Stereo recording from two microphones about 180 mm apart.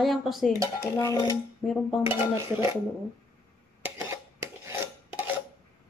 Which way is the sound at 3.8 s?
15° right (ahead or behind).